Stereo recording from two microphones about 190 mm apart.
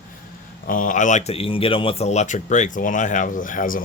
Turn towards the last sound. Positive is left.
turn(degrees=45)  # may be behind; listen again after turning